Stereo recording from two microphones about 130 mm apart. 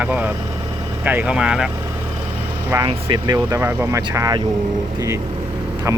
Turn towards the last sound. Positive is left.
turn(degrees=-25)  # may be behind; listen again after turning